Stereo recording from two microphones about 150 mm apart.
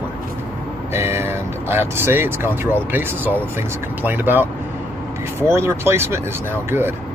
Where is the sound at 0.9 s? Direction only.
15° right (ahead or behind).